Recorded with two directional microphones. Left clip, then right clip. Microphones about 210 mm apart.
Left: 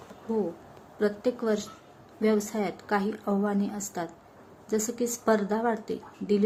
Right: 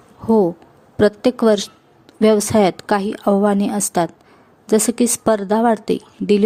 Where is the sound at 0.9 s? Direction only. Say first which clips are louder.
Right 12 dB; 50° right (ahead or behind).